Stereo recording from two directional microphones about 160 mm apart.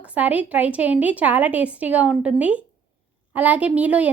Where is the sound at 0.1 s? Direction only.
10° right (ahead or behind).